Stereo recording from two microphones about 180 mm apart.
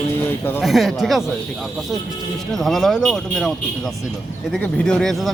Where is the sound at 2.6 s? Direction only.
Centre (ahead or behind).